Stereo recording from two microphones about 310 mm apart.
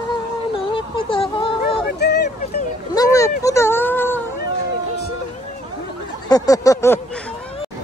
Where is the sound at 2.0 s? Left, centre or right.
Left.